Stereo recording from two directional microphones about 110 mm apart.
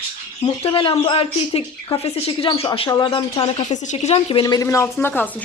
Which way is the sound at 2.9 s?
45° left (ahead or behind).